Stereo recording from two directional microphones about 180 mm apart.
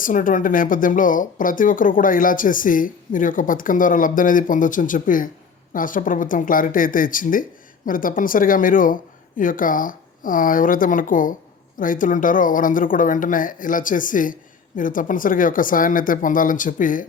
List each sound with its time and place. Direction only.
0.0 s speech: 50° left (ahead or behind)